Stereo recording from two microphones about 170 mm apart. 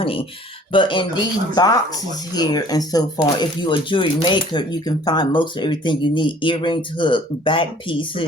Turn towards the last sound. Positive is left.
turn(degrees=30)  # may be behind; listen again after turning